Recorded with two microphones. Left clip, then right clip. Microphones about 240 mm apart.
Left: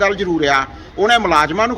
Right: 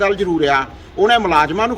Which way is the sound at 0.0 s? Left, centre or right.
Centre.